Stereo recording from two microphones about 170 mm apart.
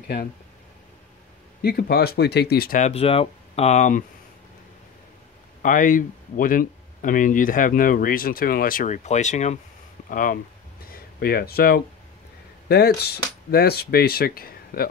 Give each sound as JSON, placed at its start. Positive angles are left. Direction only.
{"t": 1.6, "sound": "speech", "side_deg": 60}
{"t": 2.8, "sound": "speech", "side_deg": 35}
{"t": 5.6, "sound": "speech", "side_deg": 50}
{"t": 10.0, "sound": "speech", "side_deg": 55}
{"t": 10.9, "sound": "speech", "side_deg": 65}